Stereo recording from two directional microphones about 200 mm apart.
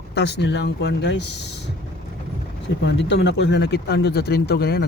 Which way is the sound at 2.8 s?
60° left (ahead or behind).